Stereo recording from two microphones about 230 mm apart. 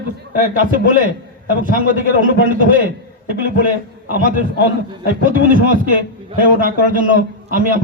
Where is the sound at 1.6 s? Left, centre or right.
Right.